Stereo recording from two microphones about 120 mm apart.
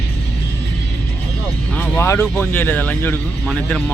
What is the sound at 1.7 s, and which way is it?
Speech, 15° left (ahead or behind).